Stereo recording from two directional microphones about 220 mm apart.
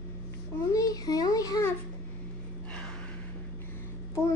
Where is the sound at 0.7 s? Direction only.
15° left (ahead or behind).